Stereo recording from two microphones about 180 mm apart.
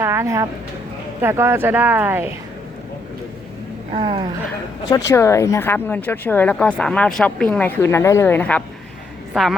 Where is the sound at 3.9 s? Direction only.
30° right (ahead or behind).